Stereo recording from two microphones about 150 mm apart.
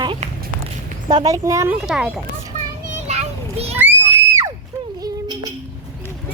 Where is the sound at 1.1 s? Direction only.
25° right (ahead or behind).